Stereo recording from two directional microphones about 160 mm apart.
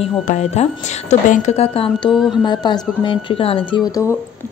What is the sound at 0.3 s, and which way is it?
Speech, 45° left (ahead or behind).